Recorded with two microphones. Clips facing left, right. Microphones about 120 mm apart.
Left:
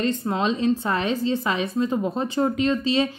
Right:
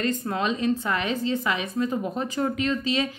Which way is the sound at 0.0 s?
25° left (ahead or behind).